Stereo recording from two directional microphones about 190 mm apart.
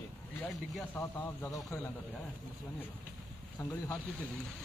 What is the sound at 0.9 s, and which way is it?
Speech, 10° left (ahead or behind).